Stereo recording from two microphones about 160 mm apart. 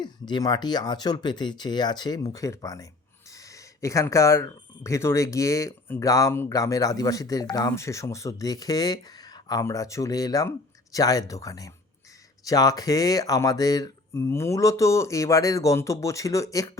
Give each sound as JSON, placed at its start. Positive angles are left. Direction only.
{"t": 0.0, "sound": "speech", "side_deg": 30}